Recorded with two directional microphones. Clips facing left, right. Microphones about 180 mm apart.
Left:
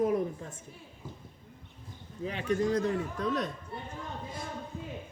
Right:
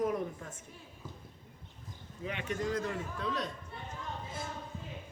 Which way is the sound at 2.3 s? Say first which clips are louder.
Left 6 dB; 35° left (ahead or behind).